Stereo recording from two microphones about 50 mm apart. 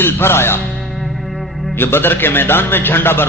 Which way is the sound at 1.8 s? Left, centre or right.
Left.